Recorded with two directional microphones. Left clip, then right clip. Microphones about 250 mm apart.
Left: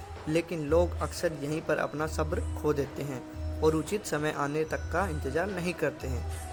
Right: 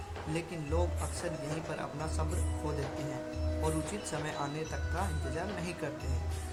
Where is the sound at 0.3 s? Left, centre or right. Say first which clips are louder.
Left 10 dB; left.